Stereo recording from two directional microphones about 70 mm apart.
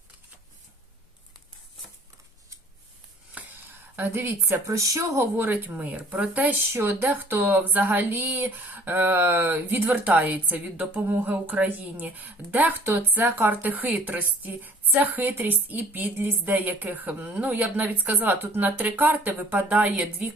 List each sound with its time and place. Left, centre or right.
3.4 s a sound: centre
3.9 s speech: right
4.7 s speech: right
5.5 s speech: right
6.6 s speech: right; by 20.2 s centre